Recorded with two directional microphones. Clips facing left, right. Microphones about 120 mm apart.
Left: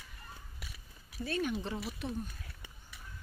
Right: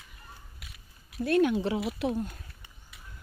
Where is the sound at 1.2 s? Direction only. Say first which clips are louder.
Right 10 dB; 75° right (ahead or behind).